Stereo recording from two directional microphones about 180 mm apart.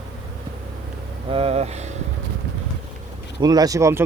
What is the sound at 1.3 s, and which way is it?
Speech, 30° right (ahead or behind).